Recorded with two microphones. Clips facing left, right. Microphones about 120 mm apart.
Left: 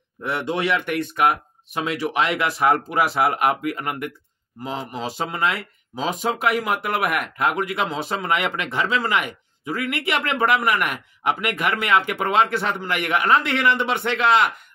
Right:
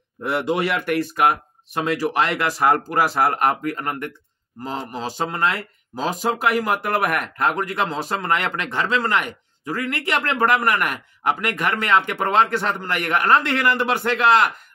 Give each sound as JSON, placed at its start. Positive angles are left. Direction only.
{"t": 0.2, "sound": "speech", "side_deg": -5}
{"t": 11.9, "sound": "speech", "side_deg": -30}
{"t": 12.4, "sound": "speech", "side_deg": 0}